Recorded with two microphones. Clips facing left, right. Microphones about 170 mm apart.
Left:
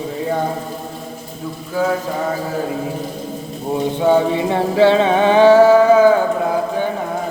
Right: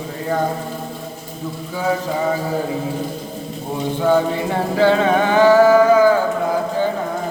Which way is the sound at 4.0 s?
20° left (ahead or behind).